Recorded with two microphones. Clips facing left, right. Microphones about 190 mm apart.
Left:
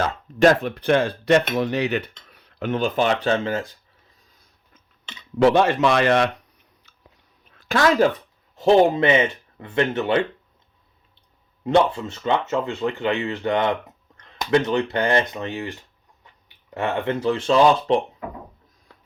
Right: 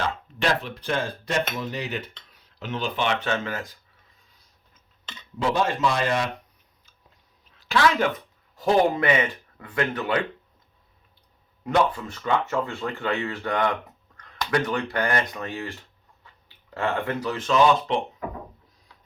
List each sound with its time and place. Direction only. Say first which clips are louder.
0.0 s speech: left 9 dB; 45° left (ahead or behind); by 3.8 s 25° left (ahead or behind)
5.4 s speech: left 7 dB; 70° left (ahead or behind)
7.4 s a sound: left 3 dB; 55° left (ahead or behind); by 8.1 s 40° left (ahead or behind)
8.5 s speech: left 5 dB; 25° left (ahead or behind)
11.6 s speech: left 4 dB; 25° left (ahead or behind)